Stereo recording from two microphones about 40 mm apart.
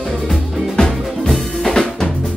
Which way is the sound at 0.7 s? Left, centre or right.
Centre.